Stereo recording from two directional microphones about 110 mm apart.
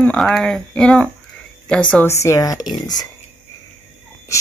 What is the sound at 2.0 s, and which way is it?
Speech, 30° left (ahead or behind).